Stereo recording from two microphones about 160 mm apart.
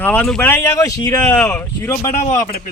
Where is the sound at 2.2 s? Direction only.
50° left (ahead or behind).